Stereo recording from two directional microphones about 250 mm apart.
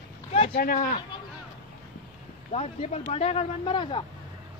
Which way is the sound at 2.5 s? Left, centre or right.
Left.